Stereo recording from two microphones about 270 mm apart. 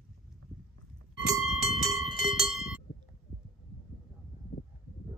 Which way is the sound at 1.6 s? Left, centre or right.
Centre.